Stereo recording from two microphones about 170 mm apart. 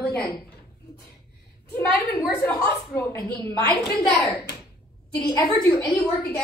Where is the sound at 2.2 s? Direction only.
15° left (ahead or behind).